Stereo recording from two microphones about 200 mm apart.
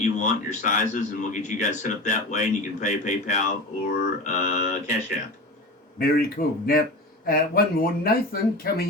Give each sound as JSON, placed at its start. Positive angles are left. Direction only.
{"t": 0.0, "sound": "speech", "side_deg": 40}
{"t": 6.0, "sound": "speech", "side_deg": 45}